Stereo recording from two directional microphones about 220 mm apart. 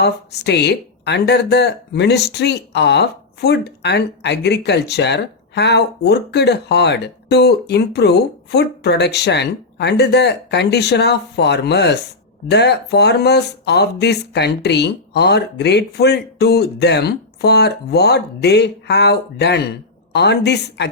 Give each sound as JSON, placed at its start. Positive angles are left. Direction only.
{"t": 0.0, "sound": "speech", "side_deg": 50}